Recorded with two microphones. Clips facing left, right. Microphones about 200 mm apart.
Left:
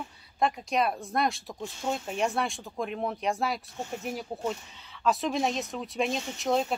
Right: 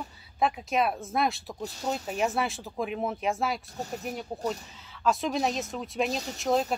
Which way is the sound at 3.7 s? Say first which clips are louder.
Even; 40° right (ahead or behind).